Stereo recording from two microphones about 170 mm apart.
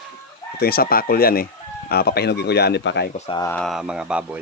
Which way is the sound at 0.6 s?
65° left (ahead or behind).